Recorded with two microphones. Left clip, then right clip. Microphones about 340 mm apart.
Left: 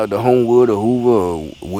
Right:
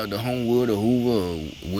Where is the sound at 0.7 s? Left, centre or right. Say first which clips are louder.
Left 7 dB; left.